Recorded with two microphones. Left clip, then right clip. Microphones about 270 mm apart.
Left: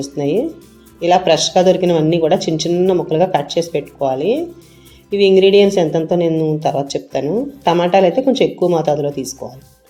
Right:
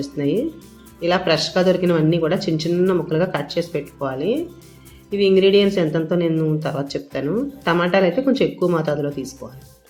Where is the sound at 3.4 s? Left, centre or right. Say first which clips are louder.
Left 5 dB; right.